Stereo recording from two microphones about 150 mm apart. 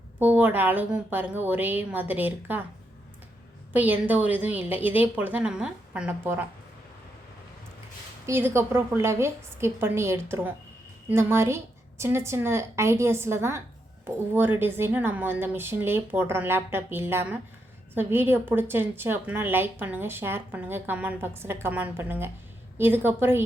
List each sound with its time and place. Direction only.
0.2 s a woman's voice: 10° right (ahead or behind)
3.7 s a woman's voice: 10° right (ahead or behind)
8.3 s a woman's voice: 15° right (ahead or behind)